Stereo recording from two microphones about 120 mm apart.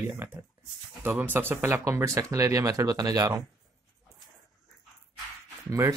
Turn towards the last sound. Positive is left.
turn(degrees=-25)  # may be behind; listen again after turning